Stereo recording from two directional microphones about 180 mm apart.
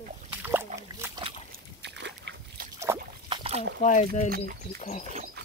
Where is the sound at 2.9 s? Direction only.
20° right (ahead or behind).